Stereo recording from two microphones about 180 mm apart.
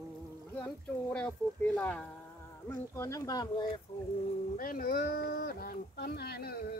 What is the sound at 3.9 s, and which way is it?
Speech, 35° left (ahead or behind).